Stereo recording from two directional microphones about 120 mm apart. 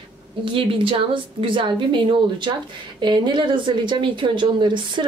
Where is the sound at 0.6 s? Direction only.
50° right (ahead or behind).